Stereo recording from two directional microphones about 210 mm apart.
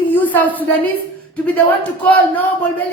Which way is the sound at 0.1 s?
10° left (ahead or behind).